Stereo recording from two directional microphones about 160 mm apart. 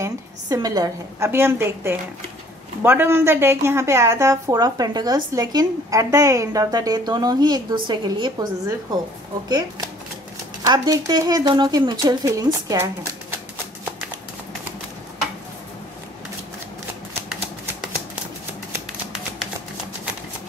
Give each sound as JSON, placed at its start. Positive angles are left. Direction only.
{"t": 0.0, "sound": "a woman's voice", "side_deg": -20}